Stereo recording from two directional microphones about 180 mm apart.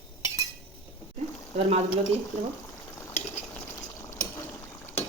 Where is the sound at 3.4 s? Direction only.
10° left (ahead or behind).